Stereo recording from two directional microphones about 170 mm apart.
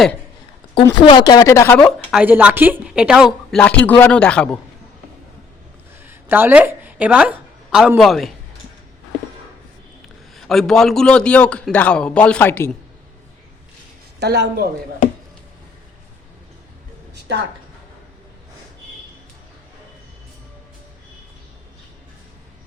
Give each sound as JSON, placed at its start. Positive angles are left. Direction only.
{"t": 1.0, "sound": "speech", "side_deg": 25}
{"t": 1.7, "sound": "a woman's voice", "side_deg": 5}
{"t": 6.0, "sound": "speech", "side_deg": -15}
{"t": 10.3, "sound": "a man's voice", "side_deg": 0}
{"t": 14.2, "sound": "speech", "side_deg": -80}